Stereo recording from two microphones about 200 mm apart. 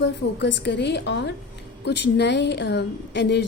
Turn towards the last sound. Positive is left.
turn(degrees=60)  # may be behind; listen again after turning